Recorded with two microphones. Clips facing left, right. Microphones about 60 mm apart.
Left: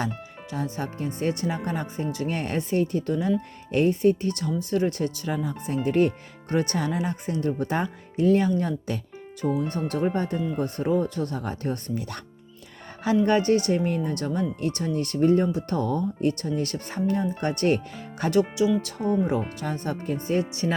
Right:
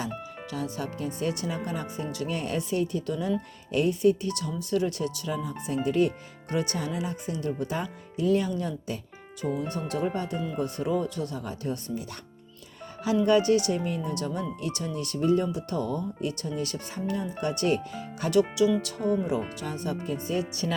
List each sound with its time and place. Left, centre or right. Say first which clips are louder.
0.5 s speech: left 3 dB; left
13.2 s speech: right 1 dB; left
19.3 s speech: left 3 dB; left